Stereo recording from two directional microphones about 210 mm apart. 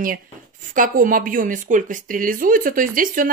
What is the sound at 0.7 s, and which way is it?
Speech, 40° right (ahead or behind).